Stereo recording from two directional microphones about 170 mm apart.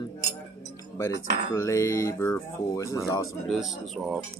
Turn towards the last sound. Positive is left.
turn(degrees=0)  # may be behind; listen again after turning